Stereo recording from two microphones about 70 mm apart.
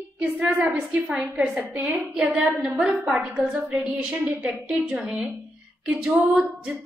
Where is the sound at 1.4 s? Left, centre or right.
Right.